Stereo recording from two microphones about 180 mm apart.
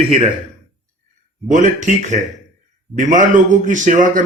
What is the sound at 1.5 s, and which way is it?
A man's voice, 45° right (ahead or behind).